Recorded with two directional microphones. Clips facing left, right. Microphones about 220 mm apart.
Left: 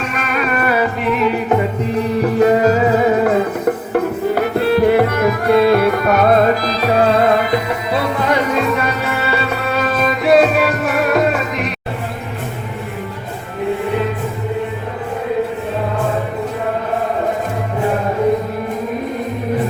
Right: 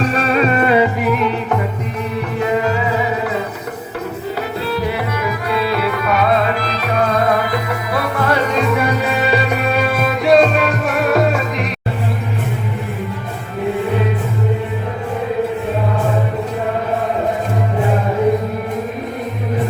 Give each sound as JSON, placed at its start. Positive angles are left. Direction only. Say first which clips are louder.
{"t": 0.0, "sound": "music", "louder": "right 5 dB", "side_deg": -30}
{"t": 1.0, "sound": "music", "louder": "left 1 dB", "side_deg": 0}
{"t": 2.4, "sound": "music", "louder": "left 5 dB", "side_deg": 40}
{"t": 8.5, "sound": "music", "louder": "even", "side_deg": 0}
{"t": 8.8, "sound": "music", "louder": "right 2 dB", "side_deg": -15}